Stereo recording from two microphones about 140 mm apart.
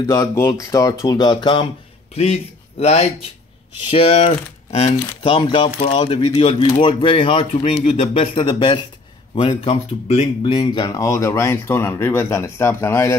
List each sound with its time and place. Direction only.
0.1 s speech: 20° left (ahead or behind)
2.1 s speech: 50° left (ahead or behind); by 13.2 s 20° left (ahead or behind)